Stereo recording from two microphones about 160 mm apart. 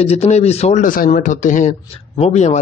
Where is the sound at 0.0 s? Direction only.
40° left (ahead or behind).